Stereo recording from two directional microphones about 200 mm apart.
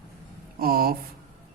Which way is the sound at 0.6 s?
50° right (ahead or behind).